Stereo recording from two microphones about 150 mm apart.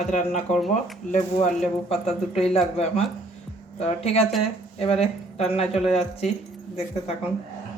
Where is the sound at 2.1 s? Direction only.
40° left (ahead or behind).